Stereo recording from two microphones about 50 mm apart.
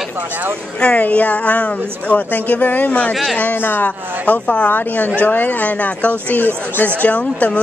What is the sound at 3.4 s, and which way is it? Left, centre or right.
Speech, left.